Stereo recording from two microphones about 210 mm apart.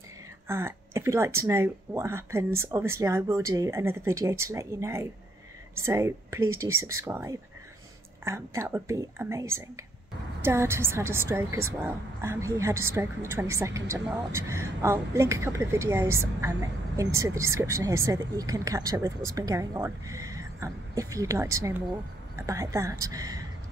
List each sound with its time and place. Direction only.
0.5 s a woman's voice: 10° right (ahead or behind)